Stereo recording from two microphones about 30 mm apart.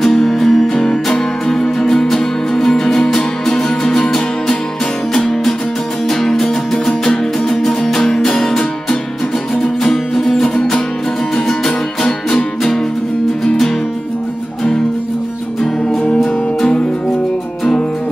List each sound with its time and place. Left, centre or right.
0.0 s music: centre
9.6 s music: centre